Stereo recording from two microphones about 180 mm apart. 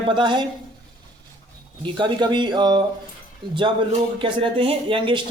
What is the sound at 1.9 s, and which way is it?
A man's voice, 25° right (ahead or behind).